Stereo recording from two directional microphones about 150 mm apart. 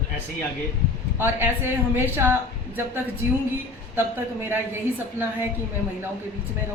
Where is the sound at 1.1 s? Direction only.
15° right (ahead or behind).